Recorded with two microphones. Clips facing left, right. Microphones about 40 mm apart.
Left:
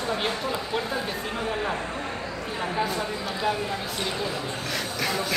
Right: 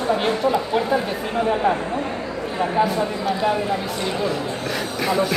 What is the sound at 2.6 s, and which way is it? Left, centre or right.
Speech, centre.